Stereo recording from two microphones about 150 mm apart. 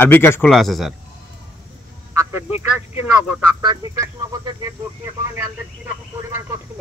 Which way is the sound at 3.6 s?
30° right (ahead or behind).